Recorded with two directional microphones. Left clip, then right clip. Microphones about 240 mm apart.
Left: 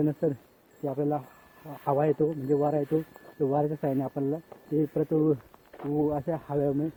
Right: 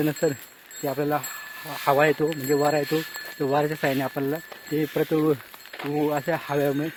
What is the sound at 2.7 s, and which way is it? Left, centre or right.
Speech, right.